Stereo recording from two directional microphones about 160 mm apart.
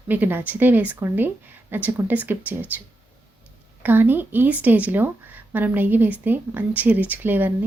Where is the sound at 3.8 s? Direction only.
10° right (ahead or behind).